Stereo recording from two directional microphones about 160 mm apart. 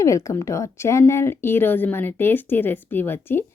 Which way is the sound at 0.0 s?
20° left (ahead or behind).